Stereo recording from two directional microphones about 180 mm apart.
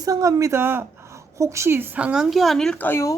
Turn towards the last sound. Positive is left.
turn(degrees=15)  # may be behind; listen again after turning